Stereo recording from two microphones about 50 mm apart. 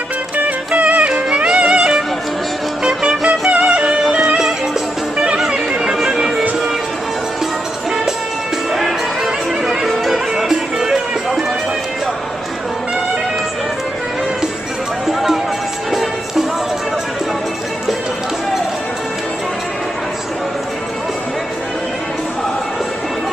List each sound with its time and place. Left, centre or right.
0.7 s music: right; by 6.4 s centre
8.7 s music: centre
15.0 s music: centre